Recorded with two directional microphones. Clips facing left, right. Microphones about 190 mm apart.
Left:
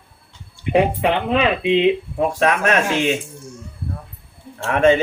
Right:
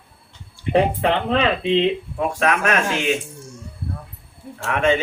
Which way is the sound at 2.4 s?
35° left (ahead or behind).